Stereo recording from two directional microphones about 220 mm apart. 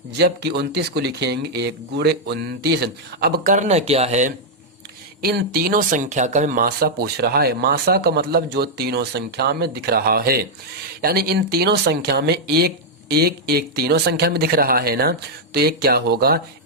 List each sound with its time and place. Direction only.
0.2 s speech: 50° right (ahead or behind); by 4.4 s 30° right (ahead or behind)
5.2 s speech: 45° right (ahead or behind)